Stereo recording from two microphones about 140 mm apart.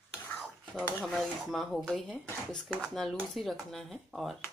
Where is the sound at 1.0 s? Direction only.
Centre (ahead or behind).